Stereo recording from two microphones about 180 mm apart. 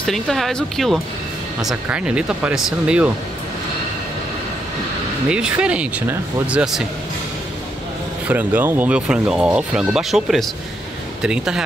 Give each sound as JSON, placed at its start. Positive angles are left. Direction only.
{"t": 0.0, "sound": "speech", "side_deg": 0}
{"t": 5.3, "sound": "speech", "side_deg": -5}
{"t": 8.3, "sound": "speech", "side_deg": -10}